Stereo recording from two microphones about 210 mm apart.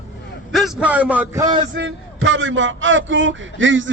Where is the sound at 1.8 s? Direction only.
65° right (ahead or behind).